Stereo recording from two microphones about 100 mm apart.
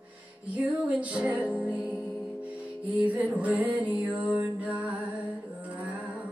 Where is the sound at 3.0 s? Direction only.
15° right (ahead or behind).